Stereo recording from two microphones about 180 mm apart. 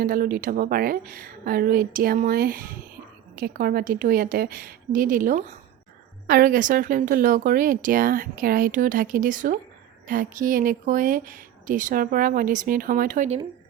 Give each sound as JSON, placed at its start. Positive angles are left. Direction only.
{"t": 0.0, "sound": "speech", "side_deg": -55}